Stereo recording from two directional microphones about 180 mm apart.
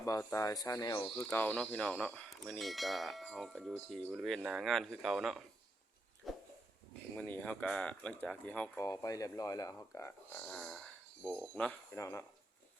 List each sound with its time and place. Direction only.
0.0 s speech: 15° left (ahead or behind)
1.1 s speech: 10° left (ahead or behind)
6.2 s a sound: centre (ahead or behind)
7.2 s speech: 10° left (ahead or behind)
8.8 s speech: 20° left (ahead or behind)